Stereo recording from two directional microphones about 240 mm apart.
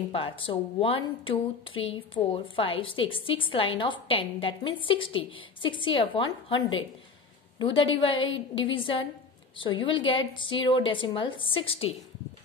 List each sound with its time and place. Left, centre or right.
0.1 s a woman's voice: left